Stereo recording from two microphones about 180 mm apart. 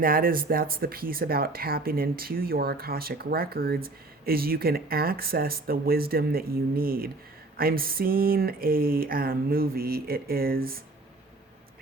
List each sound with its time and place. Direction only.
0.0 s speech: 50° right (ahead or behind)